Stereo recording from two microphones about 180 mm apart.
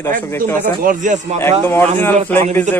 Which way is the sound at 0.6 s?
45° right (ahead or behind).